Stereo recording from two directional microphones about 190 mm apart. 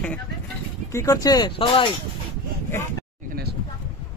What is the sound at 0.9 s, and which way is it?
Speech, 20° left (ahead or behind).